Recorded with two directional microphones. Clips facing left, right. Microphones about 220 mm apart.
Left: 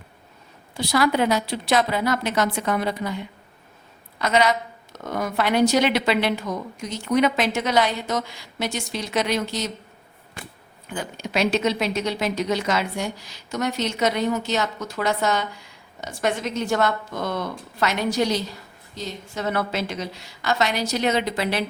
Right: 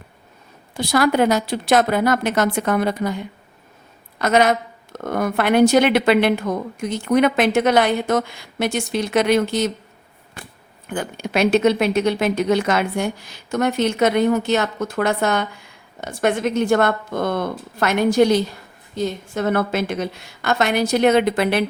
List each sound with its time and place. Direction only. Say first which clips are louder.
0.7 s a woman's voice: right 3 dB; 50° right (ahead or behind)
10.8 s a woman's voice: right 5 dB; 55° right (ahead or behind)